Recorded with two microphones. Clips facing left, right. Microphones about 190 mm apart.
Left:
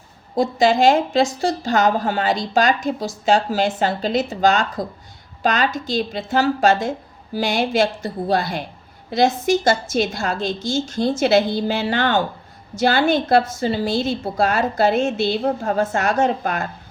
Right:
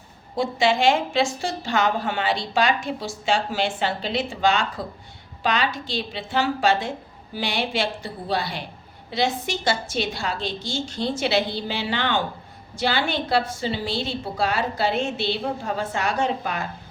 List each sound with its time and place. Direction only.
0.3 s a woman's voice: 40° left (ahead or behind)